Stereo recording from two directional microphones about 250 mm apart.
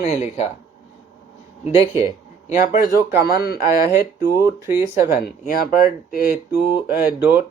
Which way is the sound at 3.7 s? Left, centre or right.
Centre.